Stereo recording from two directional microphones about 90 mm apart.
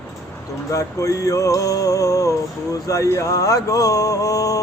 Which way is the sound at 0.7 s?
35° left (ahead or behind).